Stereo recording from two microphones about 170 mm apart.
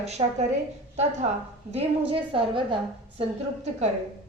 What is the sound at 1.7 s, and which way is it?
A woman's voice, 30° right (ahead or behind).